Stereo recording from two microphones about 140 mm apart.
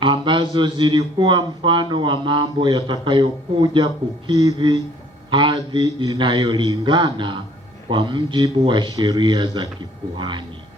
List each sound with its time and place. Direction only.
0.0 s a man's voice: 35° right (ahead or behind)